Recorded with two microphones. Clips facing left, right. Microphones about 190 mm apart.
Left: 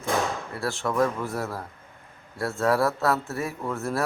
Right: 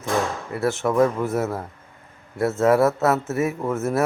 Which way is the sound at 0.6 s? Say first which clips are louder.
Right 6 dB; 20° right (ahead or behind).